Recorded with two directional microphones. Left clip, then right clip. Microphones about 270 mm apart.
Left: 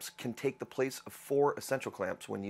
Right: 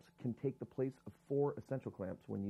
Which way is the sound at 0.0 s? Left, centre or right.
Centre.